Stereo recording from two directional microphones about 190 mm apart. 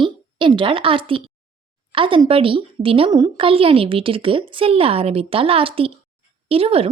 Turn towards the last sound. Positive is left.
turn(degrees=-30)  # may be behind; listen again after turning